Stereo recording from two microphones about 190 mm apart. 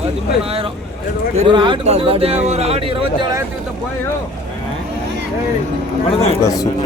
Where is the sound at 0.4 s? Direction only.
30° right (ahead or behind).